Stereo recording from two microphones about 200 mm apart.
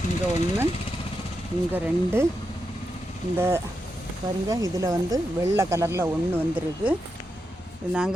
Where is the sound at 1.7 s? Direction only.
10° right (ahead or behind).